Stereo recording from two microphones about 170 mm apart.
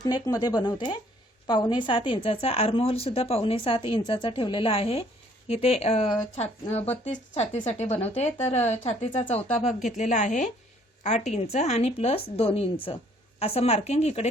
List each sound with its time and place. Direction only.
0.0 s a woman's voice: 25° left (ahead or behind); by 14.3 s 40° left (ahead or behind)